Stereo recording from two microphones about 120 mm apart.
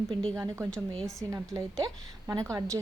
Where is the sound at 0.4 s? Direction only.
25° right (ahead or behind).